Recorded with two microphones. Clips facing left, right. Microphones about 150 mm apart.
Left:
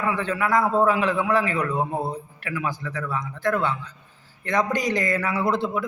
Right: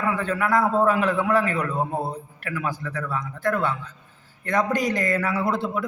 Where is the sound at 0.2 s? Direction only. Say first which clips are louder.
Even; 50° right (ahead or behind).